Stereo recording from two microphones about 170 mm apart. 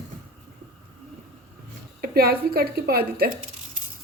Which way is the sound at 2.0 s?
65° right (ahead or behind).